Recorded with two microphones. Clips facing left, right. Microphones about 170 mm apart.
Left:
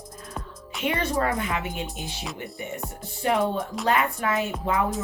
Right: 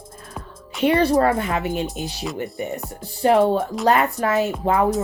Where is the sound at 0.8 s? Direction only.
35° right (ahead or behind).